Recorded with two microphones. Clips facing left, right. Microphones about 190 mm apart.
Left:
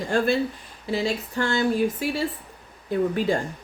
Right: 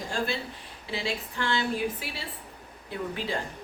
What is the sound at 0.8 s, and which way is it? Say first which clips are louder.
Speech: left 7 dB; 40° left (ahead or behind).